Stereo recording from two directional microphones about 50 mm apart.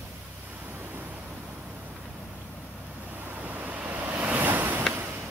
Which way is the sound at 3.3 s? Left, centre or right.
Right.